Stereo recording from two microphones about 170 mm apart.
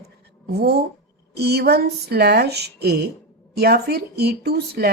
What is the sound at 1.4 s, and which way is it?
Speech, 70° right (ahead or behind).